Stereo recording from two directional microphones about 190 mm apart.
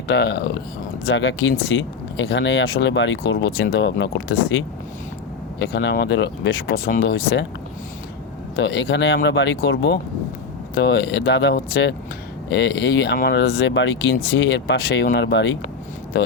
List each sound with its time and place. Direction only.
0.1 s speech: 60° left (ahead or behind)
1.0 s speech: 65° left (ahead or behind)
5.5 s speech: 65° left (ahead or behind)
6.7 s speech: 45° left (ahead or behind)
8.5 s speech: 65° left (ahead or behind)
13.6 s speech: 75° left (ahead or behind)